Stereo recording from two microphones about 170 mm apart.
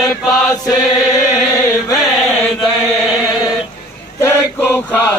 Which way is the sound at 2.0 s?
Centre (ahead or behind).